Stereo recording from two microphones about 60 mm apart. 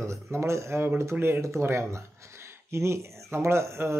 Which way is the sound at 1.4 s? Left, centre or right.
Right.